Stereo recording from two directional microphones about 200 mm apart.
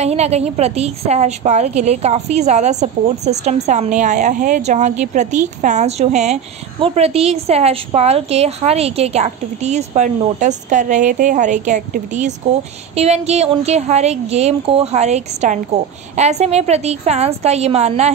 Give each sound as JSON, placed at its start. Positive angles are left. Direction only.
{"t": 0.0, "sound": "a woman's voice", "side_deg": -30}